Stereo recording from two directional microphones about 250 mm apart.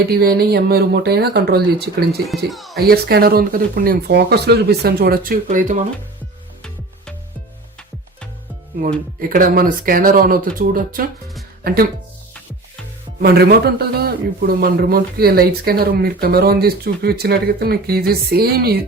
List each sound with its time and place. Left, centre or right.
0.1 s a man's voice: right
2.2 s speech: centre
2.7 s a man's voice: right
9.3 s a man's voice: right
13.2 s a man's voice: right